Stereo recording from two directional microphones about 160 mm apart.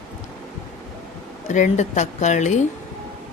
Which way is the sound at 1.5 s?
50° left (ahead or behind).